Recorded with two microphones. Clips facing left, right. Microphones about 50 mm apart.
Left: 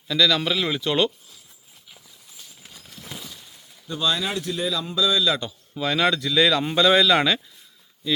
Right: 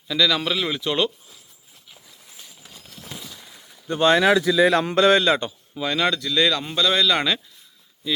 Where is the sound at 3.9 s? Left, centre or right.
Right.